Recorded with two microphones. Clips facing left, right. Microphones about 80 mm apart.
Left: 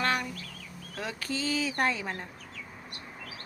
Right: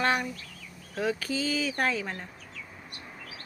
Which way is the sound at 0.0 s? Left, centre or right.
Centre.